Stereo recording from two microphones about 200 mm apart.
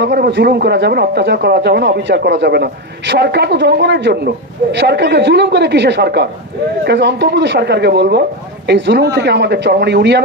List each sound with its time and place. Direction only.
0.0 s speech: 60° right (ahead or behind)